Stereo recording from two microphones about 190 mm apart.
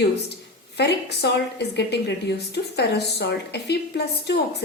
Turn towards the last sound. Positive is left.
turn(degrees=60)  # may be behind; listen again after turning